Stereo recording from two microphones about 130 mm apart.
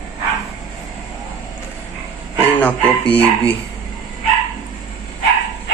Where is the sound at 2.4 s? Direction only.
15° left (ahead or behind).